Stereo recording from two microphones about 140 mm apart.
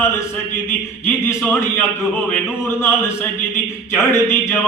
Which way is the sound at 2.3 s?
15° left (ahead or behind).